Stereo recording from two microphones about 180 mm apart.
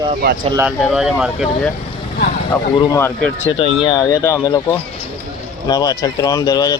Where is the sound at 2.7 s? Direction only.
20° left (ahead or behind).